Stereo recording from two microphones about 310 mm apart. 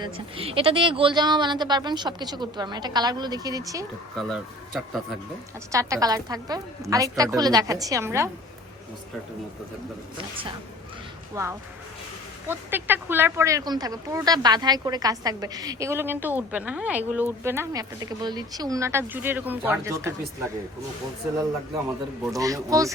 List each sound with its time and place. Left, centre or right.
0.0 s speech: centre
4.1 s speech: centre
11.4 s speech: centre
22.3 s speech: centre